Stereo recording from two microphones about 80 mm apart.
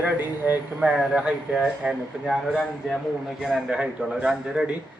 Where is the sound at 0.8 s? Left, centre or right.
Centre.